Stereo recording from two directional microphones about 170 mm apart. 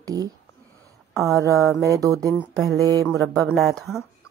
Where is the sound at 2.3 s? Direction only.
Centre (ahead or behind).